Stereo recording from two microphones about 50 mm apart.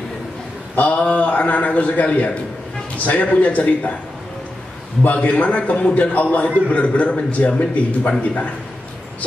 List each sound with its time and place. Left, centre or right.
0.7 s a man's voice: left
5.0 s a man's voice: left